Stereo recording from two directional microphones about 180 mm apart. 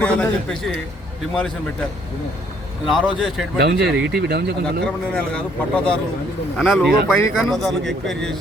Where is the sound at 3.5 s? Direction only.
65° right (ahead or behind).